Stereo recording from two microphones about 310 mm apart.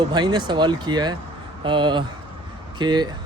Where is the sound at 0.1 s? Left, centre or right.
Centre.